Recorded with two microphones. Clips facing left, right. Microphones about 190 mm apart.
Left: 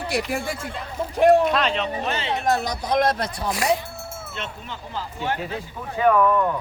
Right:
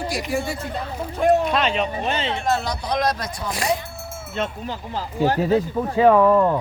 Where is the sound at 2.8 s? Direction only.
50° left (ahead or behind).